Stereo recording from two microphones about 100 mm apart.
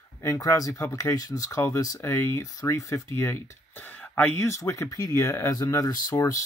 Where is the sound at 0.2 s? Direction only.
35° left (ahead or behind).